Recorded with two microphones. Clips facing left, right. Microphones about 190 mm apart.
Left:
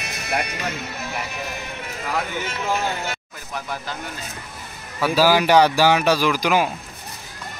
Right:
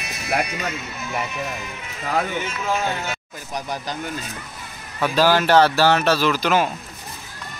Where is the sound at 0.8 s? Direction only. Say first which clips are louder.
Left 1 dB; 75° left (ahead or behind).